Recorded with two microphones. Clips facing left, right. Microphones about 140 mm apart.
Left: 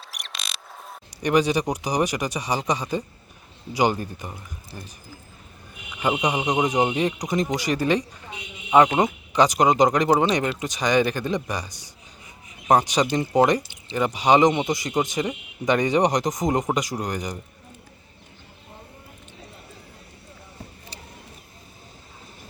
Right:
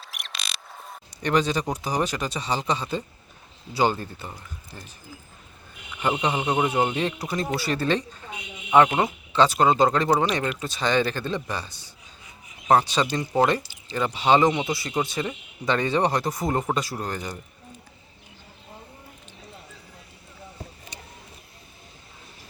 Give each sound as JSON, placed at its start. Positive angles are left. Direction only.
{"t": 0.1, "sound": "a sound", "side_deg": 0}
{"t": 1.1, "sound": "speech", "side_deg": 10}
{"t": 6.0, "sound": "speech", "side_deg": 15}